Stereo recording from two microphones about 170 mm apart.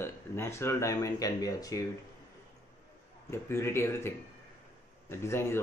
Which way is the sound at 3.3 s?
15° left (ahead or behind).